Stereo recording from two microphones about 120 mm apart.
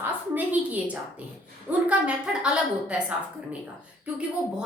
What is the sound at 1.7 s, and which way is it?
A woman's voice, 10° right (ahead or behind).